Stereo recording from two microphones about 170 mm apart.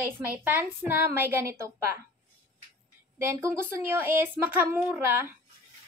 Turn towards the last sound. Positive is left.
turn(degrees=-15)  # may be behind; listen again after turning